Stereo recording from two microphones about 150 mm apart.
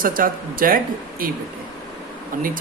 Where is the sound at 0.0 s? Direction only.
65° right (ahead or behind).